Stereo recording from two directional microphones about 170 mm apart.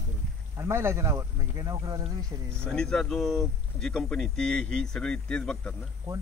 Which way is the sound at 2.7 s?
5° left (ahead or behind).